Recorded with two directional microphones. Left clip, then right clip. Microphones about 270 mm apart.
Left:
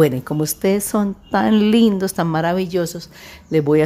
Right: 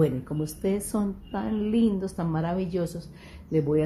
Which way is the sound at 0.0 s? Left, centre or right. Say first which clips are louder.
Left 10 dB; left.